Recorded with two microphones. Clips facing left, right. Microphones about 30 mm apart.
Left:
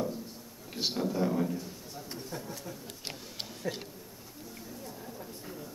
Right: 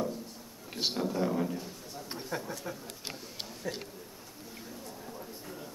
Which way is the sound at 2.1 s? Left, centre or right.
Right.